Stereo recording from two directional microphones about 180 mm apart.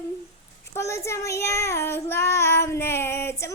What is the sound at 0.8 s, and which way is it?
Child singing, 15° left (ahead or behind).